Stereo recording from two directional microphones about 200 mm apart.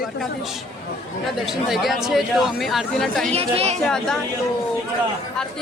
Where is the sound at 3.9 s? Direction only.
5° left (ahead or behind).